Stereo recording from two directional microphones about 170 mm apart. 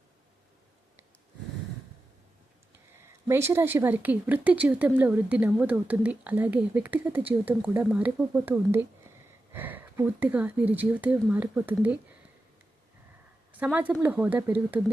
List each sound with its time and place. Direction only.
3.2 s speech: 15° right (ahead or behind)
13.5 s a woman's voice: 10° right (ahead or behind)